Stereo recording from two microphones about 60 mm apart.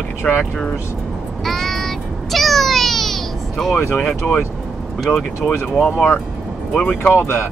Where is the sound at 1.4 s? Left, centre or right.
Centre.